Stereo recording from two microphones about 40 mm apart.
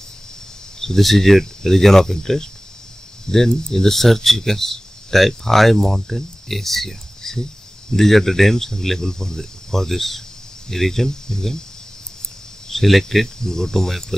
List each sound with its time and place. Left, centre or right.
0.7 s speech: centre
12.6 s speech: centre
13.4 s speech: centre